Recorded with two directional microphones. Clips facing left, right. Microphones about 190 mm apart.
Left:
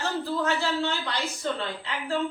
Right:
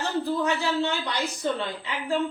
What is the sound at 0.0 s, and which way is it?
A man's voice, 15° right (ahead or behind).